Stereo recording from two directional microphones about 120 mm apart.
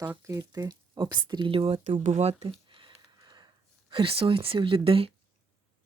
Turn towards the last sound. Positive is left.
turn(degrees=-50)  # may be behind; listen again after turning